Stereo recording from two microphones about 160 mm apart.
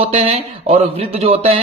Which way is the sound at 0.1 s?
40° right (ahead or behind).